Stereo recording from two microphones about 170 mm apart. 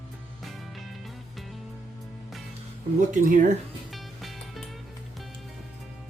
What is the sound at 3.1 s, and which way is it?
Speech, 50° right (ahead or behind).